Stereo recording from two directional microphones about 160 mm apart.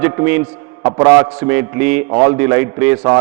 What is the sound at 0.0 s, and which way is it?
A man's voice, 10° right (ahead or behind).